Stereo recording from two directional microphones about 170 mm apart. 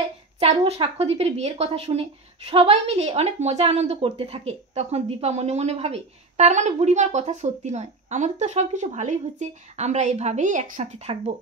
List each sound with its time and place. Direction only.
0.4 s speech: 35° right (ahead or behind)